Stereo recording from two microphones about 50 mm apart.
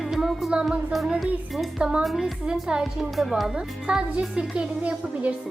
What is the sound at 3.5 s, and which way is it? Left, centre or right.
Speech, centre.